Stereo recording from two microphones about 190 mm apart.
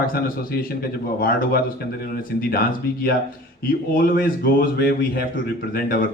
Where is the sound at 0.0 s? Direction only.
50° left (ahead or behind).